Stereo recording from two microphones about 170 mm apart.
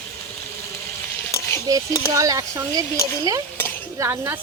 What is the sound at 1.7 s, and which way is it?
A woman's voice, 20° right (ahead or behind).